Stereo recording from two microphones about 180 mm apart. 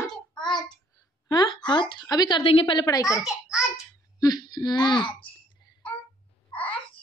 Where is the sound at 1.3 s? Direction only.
25° left (ahead or behind).